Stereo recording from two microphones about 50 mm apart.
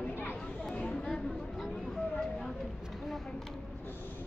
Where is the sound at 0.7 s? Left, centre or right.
Centre.